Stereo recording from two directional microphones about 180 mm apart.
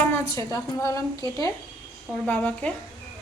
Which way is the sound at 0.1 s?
15° left (ahead or behind).